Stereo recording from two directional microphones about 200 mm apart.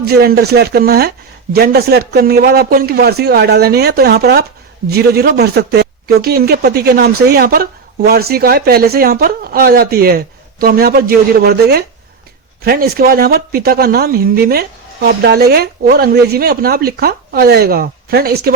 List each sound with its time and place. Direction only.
0.0 s speech: 50° right (ahead or behind)